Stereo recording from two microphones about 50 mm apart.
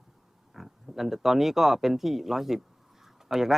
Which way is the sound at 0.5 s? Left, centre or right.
Centre.